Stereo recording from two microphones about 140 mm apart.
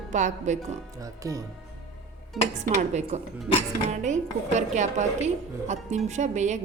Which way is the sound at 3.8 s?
55° right (ahead or behind).